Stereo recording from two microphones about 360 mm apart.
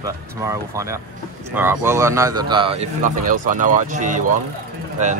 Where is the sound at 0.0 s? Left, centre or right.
Centre.